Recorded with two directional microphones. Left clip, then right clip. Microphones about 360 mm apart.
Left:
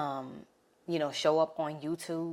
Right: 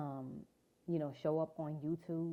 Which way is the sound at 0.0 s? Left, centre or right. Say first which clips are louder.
Left 10 dB; centre.